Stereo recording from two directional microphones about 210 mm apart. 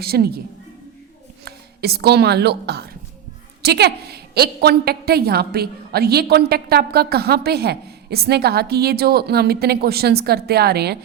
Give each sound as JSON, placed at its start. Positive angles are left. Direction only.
{"t": 0.0, "sound": "a woman's voice", "side_deg": -50}
{"t": 1.5, "sound": "a woman's voice", "side_deg": -50}